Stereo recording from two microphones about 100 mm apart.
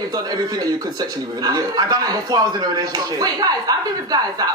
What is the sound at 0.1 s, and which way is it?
Speech, 40° right (ahead or behind).